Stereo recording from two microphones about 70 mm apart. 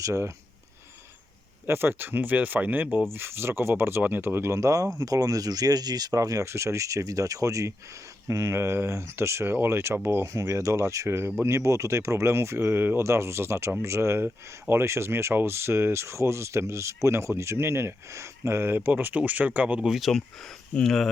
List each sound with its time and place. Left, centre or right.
0.0 s speech: right
1.6 s speech: right
10.3 s speech: right; by 19.8 s centre
19.8 s speech: centre